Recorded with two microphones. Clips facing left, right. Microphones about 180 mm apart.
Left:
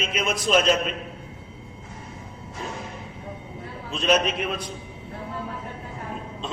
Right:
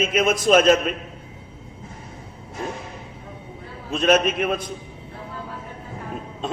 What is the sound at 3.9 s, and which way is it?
Speech, 50° right (ahead or behind).